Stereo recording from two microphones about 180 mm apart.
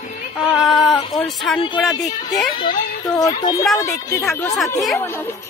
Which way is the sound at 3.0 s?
20° left (ahead or behind).